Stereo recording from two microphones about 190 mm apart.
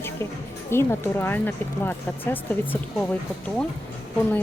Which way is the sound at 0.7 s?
15° left (ahead or behind).